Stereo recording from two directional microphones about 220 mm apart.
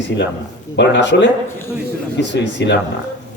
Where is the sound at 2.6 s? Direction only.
50° left (ahead or behind).